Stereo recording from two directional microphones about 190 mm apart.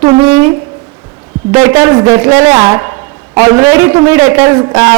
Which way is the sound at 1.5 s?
15° right (ahead or behind).